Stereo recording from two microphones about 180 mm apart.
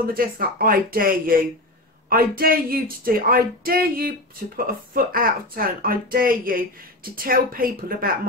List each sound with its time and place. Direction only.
0.0 s speech: 55° right (ahead or behind)